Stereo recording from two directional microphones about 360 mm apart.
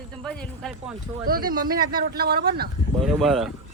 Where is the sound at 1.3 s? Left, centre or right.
Right.